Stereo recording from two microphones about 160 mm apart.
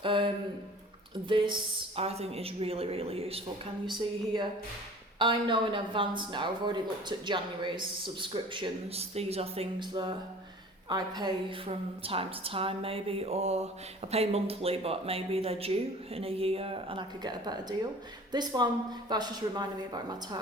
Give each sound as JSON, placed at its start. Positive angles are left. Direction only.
{"t": 0.0, "sound": "a woman's voice", "side_deg": -30}
{"t": 2.0, "sound": "a woman's voice", "side_deg": -40}